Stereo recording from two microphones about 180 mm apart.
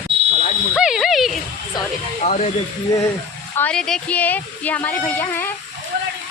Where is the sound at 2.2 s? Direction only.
40° left (ahead or behind).